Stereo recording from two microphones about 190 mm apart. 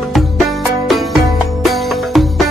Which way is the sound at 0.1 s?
Centre (ahead or behind).